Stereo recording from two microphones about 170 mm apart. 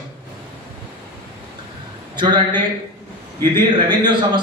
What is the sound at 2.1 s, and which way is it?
A man's voice, 25° right (ahead or behind).